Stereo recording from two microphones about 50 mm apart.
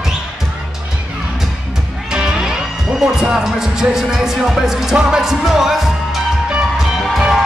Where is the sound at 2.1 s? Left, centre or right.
Centre.